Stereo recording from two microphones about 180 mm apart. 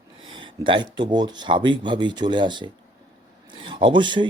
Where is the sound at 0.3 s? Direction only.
25° right (ahead or behind).